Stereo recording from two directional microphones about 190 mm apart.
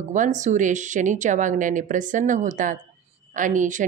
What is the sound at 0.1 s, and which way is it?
A woman's voice, 40° right (ahead or behind).